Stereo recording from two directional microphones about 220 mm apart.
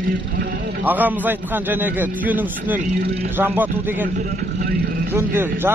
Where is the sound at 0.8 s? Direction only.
10° right (ahead or behind).